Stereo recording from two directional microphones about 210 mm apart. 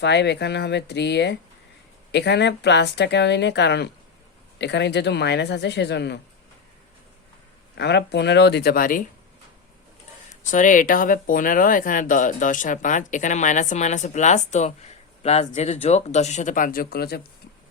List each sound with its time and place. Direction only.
0.0 s a woman's voice: 55° left (ahead or behind)
7.8 s a woman's voice: 55° left (ahead or behind)
10.2 s speech: 35° left (ahead or behind)